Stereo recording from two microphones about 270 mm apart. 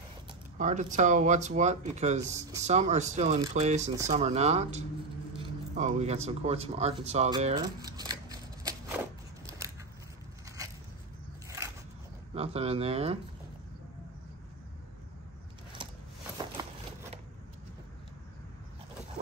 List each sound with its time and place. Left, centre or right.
0.6 s speech: right
2.2 s speech: centre
2.6 s speech: right
11.4 s biting: centre
12.4 s speech: right